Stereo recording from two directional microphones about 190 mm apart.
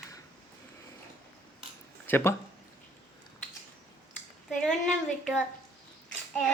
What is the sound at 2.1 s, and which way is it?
Speech, 10° left (ahead or behind).